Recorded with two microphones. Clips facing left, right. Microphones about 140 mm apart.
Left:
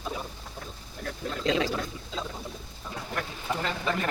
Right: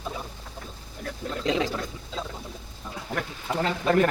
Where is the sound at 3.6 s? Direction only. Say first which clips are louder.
Right 9 dB; 50° right (ahead or behind).